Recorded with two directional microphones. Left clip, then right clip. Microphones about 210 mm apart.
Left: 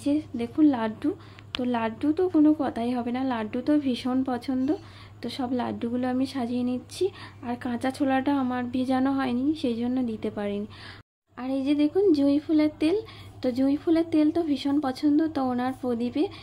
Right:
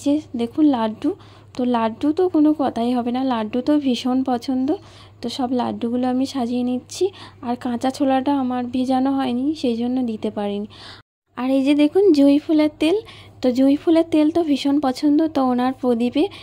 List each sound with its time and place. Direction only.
0.0 s a woman's voice: 30° right (ahead or behind)
11.3 s speech: 40° right (ahead or behind)